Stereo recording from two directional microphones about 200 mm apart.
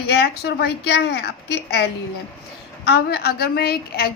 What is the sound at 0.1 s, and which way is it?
A woman's voice, 55° left (ahead or behind).